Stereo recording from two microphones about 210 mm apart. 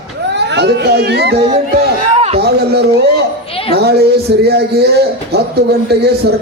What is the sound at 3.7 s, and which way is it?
A man's voice, 50° right (ahead or behind).